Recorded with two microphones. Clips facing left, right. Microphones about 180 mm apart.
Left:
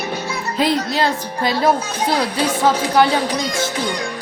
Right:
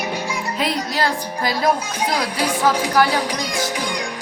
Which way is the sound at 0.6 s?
25° left (ahead or behind).